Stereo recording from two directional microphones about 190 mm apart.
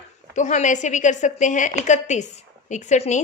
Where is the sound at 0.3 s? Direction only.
40° left (ahead or behind).